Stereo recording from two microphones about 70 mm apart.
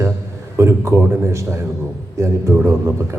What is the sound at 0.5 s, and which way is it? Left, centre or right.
A man's voice, right.